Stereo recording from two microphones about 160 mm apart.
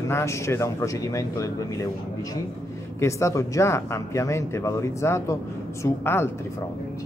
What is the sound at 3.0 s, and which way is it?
A man's voice, 20° left (ahead or behind).